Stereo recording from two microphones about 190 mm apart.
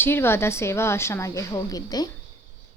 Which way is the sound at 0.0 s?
10° left (ahead or behind).